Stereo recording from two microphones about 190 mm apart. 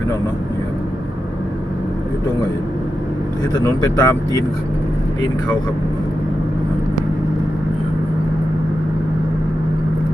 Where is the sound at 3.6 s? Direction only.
15° left (ahead or behind).